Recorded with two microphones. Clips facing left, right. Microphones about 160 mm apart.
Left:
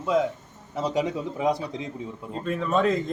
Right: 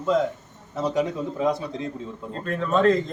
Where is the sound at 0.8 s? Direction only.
15° left (ahead or behind).